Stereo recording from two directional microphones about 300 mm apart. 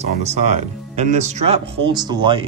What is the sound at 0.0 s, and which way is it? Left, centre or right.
Speech, right.